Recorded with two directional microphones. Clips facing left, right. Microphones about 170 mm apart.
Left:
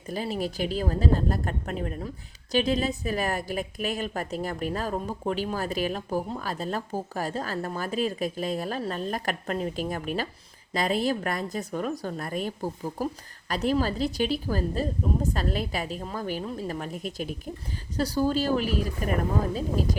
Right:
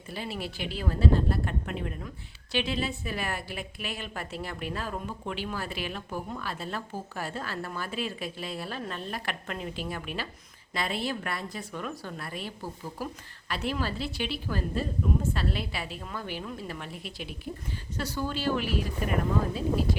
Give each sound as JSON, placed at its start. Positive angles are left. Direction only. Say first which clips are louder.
{"t": 0.1, "sound": "a woman's voice", "louder": "left 6 dB", "side_deg": 40}